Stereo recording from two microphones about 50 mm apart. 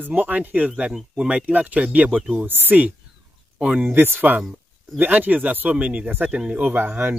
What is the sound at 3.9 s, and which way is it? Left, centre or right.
Speech, right.